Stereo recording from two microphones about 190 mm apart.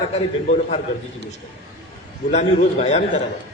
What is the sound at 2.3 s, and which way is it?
Speech, 35° left (ahead or behind).